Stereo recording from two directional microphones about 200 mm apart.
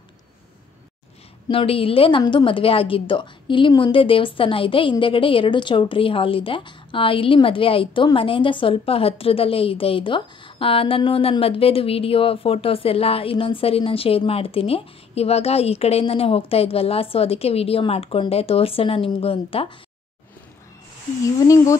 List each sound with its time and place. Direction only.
1.5 s a woman's voice: 25° left (ahead or behind)
21.2 s speech: 15° left (ahead or behind)